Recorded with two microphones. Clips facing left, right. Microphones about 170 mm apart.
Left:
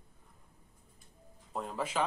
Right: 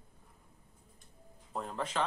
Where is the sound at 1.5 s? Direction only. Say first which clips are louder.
Left 1 dB; 5° left (ahead or behind).